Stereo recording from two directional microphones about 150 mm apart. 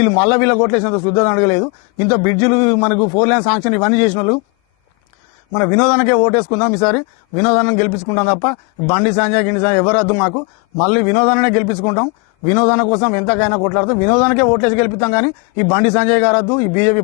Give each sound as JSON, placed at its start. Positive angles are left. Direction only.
{"t": 0.0, "sound": "a man's voice", "side_deg": 15}
{"t": 5.5, "sound": "a man's voice", "side_deg": 20}